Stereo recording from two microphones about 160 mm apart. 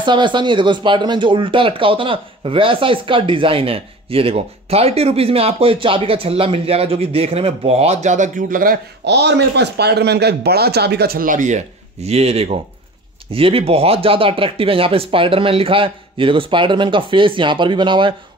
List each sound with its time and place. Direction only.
0.0 s speech: 30° right (ahead or behind)